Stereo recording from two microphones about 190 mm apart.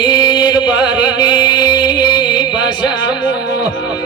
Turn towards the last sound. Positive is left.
turn(degrees=25)  # may be behind; listen again after turning